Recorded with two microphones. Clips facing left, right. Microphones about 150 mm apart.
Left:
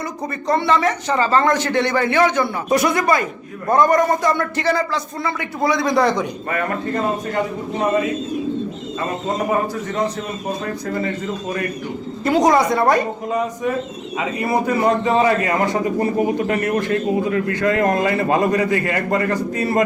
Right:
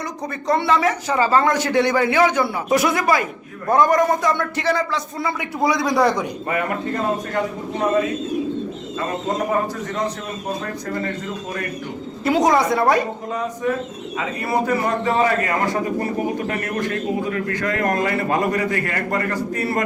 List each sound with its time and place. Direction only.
0.4 s a man's voice: centre (ahead or behind)
5.2 s speech: 10° right (ahead or behind)
12.2 s a man's voice: centre (ahead or behind)
14.4 s a man's voice: 20° left (ahead or behind)